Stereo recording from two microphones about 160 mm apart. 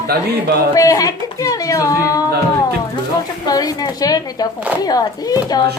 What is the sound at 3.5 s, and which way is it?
Speech, 25° left (ahead or behind).